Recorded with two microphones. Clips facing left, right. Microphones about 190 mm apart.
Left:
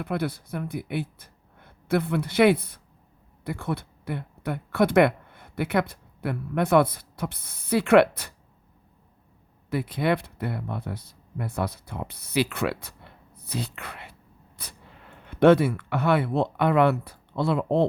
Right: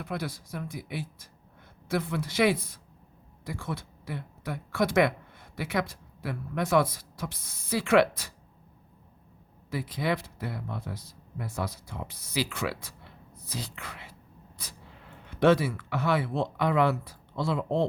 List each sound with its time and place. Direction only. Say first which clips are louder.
0.0 s speech: left 6 dB; 60° left (ahead or behind)
9.6 s speech: left 5 dB; 60° left (ahead or behind)
14.6 s a sound: left 2 dB; 60° left (ahead or behind)
15.3 s speech: left 5 dB; 60° left (ahead or behind)